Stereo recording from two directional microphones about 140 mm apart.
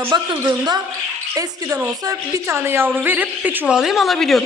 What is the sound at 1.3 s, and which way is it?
A woman's voice, 20° right (ahead or behind).